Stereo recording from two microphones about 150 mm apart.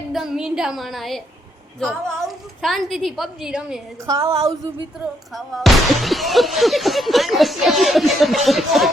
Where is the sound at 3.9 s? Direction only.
20° right (ahead or behind).